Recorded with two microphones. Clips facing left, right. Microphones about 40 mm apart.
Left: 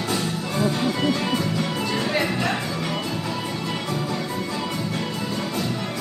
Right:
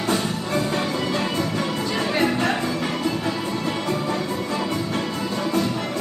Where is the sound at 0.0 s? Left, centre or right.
Right.